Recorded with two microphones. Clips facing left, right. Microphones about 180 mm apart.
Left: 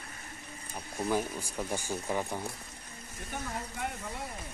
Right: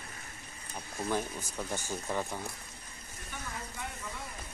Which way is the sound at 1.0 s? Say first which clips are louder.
Left 3 dB; 10° left (ahead or behind).